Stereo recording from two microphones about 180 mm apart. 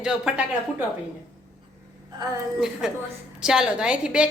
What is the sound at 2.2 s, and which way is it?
Speech, 20° right (ahead or behind).